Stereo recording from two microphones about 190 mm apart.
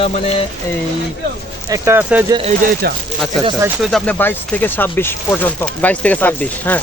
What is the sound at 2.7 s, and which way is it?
Speech, 55° right (ahead or behind).